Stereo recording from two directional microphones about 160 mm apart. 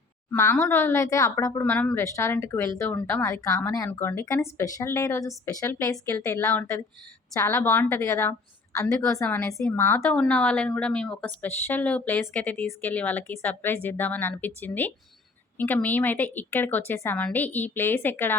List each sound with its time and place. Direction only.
0.3 s speech: 15° left (ahead or behind)